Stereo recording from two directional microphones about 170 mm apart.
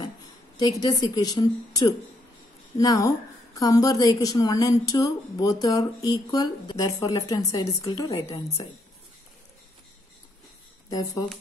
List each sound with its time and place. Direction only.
0.6 s a woman's voice: 25° left (ahead or behind)
10.9 s a woman's voice: 20° left (ahead or behind)